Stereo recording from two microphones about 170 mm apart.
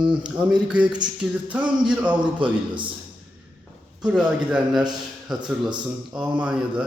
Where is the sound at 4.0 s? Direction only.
5° right (ahead or behind).